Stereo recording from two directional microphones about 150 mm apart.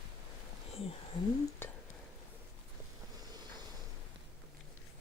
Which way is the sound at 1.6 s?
15° left (ahead or behind).